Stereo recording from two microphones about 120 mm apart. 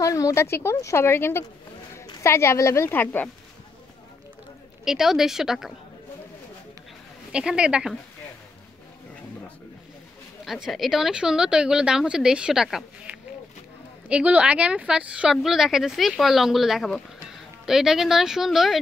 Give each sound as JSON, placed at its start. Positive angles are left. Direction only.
{"t": 0.0, "sound": "speech", "side_deg": 25}
{"t": 4.8, "sound": "speech", "side_deg": -5}
{"t": 7.3, "sound": "a woman's voice", "side_deg": -10}
{"t": 10.4, "sound": "speech", "side_deg": 0}